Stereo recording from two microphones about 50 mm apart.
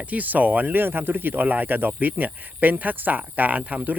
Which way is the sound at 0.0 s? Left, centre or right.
Right.